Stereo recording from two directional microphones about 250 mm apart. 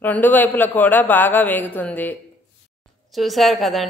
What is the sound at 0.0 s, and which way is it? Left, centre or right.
A man's voice, centre.